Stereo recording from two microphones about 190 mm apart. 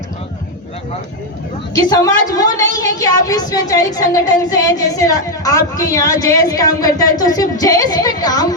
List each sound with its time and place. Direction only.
1.9 s a woman's voice: 20° left (ahead or behind)